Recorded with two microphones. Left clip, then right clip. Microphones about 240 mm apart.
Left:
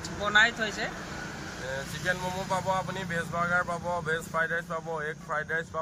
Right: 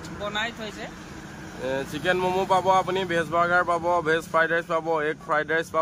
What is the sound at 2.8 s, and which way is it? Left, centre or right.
Speech, right.